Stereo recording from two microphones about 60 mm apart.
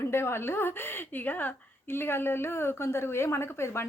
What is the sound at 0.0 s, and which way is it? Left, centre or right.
A woman's voice, left.